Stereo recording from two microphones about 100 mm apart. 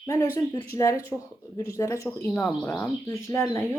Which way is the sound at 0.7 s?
30° left (ahead or behind).